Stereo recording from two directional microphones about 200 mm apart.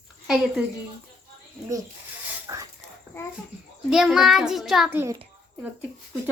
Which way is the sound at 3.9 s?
5° right (ahead or behind).